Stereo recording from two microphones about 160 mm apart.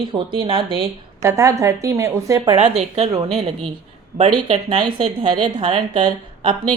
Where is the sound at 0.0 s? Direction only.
30° right (ahead or behind).